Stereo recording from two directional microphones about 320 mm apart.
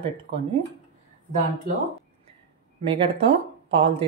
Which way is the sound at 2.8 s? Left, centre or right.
Centre.